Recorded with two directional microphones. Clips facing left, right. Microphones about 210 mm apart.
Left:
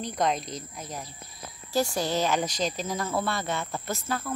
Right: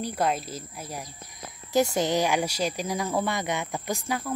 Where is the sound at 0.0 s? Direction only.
5° right (ahead or behind).